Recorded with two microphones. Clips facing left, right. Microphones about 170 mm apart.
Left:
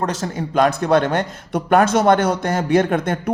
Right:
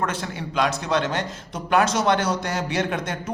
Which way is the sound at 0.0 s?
40° left (ahead or behind).